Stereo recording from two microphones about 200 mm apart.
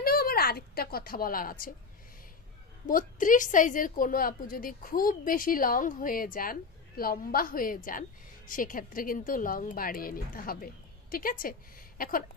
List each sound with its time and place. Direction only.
0.0 s speech: 50° left (ahead or behind)
2.9 s a woman's voice: 45° left (ahead or behind)